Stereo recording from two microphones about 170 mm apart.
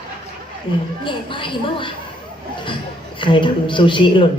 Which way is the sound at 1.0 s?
30° left (ahead or behind).